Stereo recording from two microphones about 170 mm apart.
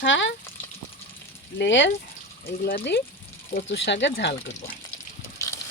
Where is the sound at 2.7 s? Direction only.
70° left (ahead or behind).